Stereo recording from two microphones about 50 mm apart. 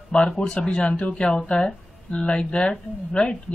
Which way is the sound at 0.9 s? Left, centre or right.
Left.